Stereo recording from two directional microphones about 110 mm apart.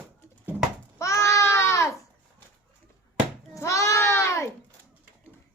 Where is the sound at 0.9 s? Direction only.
25° left (ahead or behind).